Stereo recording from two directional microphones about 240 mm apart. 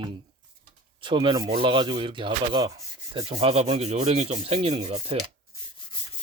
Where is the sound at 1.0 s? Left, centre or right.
Right.